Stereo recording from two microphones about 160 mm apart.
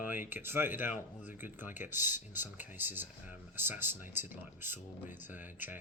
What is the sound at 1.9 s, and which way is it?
Speech, 50° left (ahead or behind).